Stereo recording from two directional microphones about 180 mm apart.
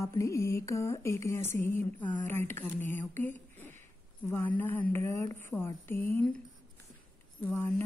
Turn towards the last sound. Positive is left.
turn(degrees=10)  # may be behind; listen again after turning